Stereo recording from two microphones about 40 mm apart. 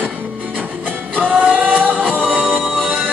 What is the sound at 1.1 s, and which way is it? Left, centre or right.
Music, right.